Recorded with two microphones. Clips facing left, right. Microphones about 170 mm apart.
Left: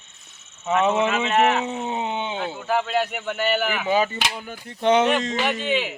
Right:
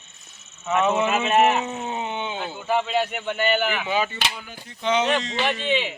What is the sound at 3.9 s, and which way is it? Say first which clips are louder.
Speech: left 7 dB; 40° left (ahead or behind).